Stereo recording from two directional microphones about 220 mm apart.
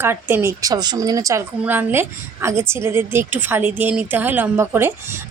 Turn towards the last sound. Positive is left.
turn(degrees=-10)  # may be behind; listen again after turning